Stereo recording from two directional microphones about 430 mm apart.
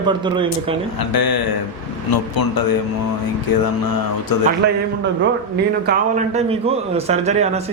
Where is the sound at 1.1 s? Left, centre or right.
Left.